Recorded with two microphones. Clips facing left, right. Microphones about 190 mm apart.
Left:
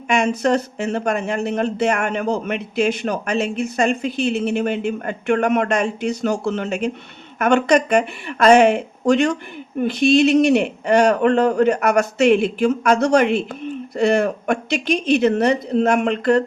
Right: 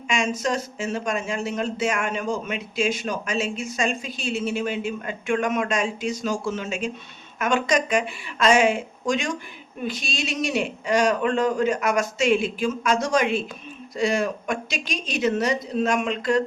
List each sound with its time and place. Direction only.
0.1 s speech: 60° left (ahead or behind)